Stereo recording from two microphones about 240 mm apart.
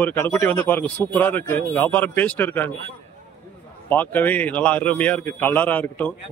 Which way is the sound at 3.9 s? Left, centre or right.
Centre.